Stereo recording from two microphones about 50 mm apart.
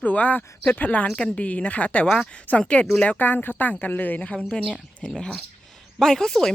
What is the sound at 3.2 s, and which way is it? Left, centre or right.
Speech, left.